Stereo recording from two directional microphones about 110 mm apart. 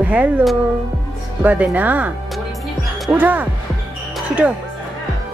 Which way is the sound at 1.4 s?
15° right (ahead or behind).